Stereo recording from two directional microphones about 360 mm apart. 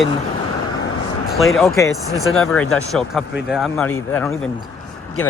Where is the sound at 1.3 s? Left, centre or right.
Centre.